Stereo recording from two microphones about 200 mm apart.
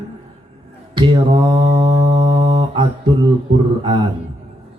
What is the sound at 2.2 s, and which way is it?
Mantra, 25° right (ahead or behind).